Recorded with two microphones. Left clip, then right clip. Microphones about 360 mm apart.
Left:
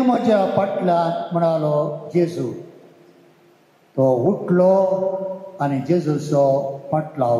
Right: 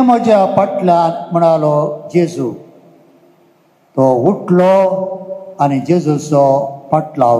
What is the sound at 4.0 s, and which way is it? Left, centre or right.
Speech, right.